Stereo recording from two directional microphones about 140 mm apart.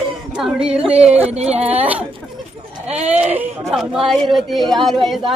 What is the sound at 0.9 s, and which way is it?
Speech, 50° right (ahead or behind).